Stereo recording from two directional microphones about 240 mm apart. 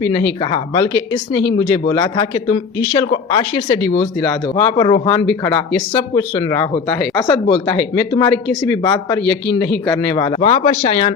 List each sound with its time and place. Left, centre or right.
0.5 s speech: left
1.9 s speech: centre